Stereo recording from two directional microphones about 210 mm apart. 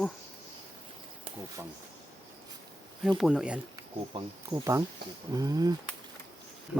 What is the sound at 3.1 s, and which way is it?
A man's voice, centre (ahead or behind).